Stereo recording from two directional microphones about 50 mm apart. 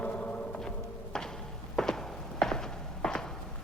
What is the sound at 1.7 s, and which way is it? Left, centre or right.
Walk, centre.